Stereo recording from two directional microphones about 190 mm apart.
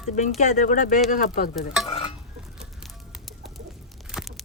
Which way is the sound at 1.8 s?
25° left (ahead or behind).